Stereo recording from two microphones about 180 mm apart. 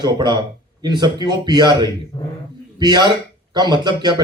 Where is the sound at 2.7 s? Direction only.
25° right (ahead or behind).